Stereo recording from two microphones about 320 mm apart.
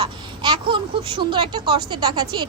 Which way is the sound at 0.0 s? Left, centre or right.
Centre.